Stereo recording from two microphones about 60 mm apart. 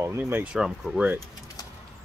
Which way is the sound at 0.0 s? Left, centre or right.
Right.